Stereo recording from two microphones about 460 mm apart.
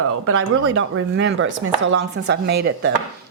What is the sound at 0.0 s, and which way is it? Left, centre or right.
A woman's voice, right.